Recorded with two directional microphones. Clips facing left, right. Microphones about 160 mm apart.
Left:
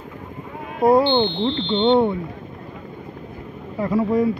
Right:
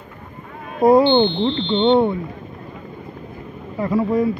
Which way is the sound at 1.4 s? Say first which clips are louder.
Right 2 dB; 30° right (ahead or behind).